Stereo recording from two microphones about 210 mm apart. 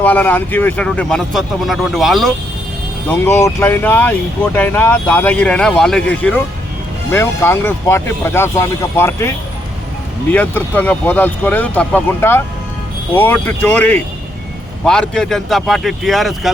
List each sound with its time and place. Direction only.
0.0 s speech: 10° left (ahead or behind)
3.1 s speech: 10° left (ahead or behind)
10.3 s speech: 10° left (ahead or behind)